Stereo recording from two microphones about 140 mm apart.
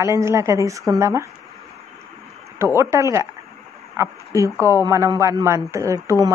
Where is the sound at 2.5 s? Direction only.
20° right (ahead or behind).